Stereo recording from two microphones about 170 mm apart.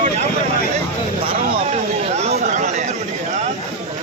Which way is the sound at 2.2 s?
40° right (ahead or behind).